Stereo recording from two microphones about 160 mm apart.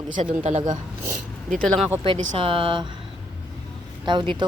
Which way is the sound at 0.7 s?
55° right (ahead or behind).